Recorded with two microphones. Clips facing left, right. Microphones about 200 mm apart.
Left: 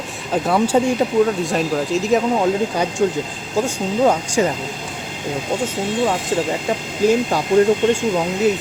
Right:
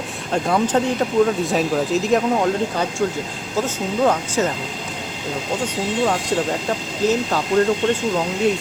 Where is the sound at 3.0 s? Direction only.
20° left (ahead or behind).